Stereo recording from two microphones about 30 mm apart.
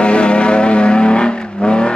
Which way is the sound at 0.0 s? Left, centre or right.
Left.